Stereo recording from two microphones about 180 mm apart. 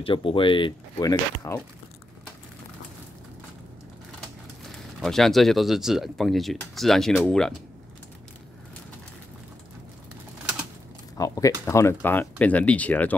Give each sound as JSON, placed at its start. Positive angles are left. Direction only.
{"t": 0.0, "sound": "speech", "side_deg": 30}
{"t": 4.7, "sound": "speech", "side_deg": 0}
{"t": 11.1, "sound": "speech", "side_deg": 20}